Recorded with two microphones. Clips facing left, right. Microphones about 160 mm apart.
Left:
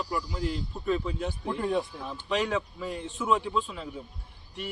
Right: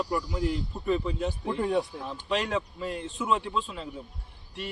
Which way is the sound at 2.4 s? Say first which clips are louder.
Left 1 dB; centre (ahead or behind).